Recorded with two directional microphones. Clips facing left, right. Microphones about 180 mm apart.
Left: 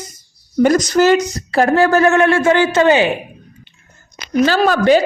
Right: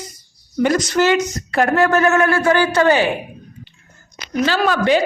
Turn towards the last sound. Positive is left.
turn(degrees=40)  # may be behind; listen again after turning